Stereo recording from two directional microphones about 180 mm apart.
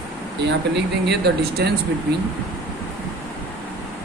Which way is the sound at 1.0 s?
65° right (ahead or behind).